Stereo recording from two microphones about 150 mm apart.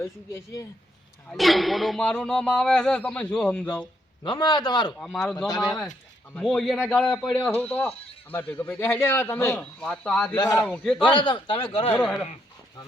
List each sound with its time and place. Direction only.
0.0 s a man's voice: 15° left (ahead or behind)
1.3 s speech: centre (ahead or behind)
4.2 s speech: 30° left (ahead or behind)
4.9 s speech: 5° left (ahead or behind)
7.5 s a man's voice: 15° left (ahead or behind)
10.3 s speech: 25° left (ahead or behind)
10.7 s a man's voice: 10° left (ahead or behind)
11.0 s a man's voice: 35° left (ahead or behind)
11.9 s a man's voice: 10° left (ahead or behind)